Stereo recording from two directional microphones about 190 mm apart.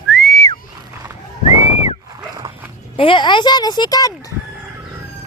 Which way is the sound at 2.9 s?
25° left (ahead or behind).